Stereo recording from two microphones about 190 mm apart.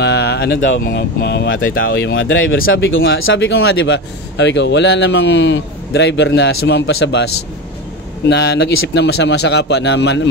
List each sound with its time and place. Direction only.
0.0 s a sound: 60° left (ahead or behind)
0.8 s speech: 60° left (ahead or behind); by 7.2 s 80° left
8.3 s speech: 60° left (ahead or behind)